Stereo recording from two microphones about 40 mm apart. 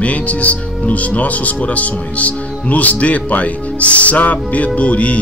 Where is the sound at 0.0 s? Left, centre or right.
Left.